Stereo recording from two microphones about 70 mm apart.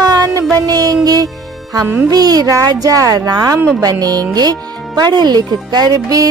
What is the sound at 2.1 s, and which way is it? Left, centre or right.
Speech, right.